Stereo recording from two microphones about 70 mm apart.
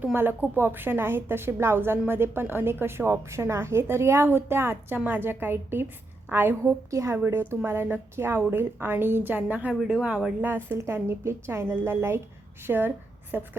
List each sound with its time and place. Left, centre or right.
0.0 s a woman's voice: right
6.6 s a woman's voice: right
7.3 s a woman's voice: right
9.8 s speech: centre
10.4 s a woman's voice: right